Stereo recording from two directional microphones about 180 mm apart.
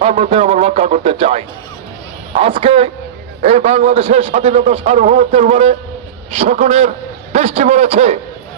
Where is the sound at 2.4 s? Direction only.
30° right (ahead or behind).